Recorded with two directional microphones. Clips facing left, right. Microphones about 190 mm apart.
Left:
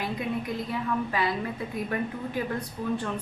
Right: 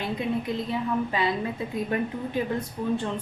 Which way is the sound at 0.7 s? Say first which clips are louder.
Right 2 dB; 25° right (ahead or behind).